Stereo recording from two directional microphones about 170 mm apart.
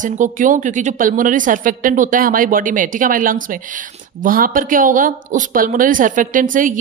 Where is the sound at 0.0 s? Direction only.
50° right (ahead or behind).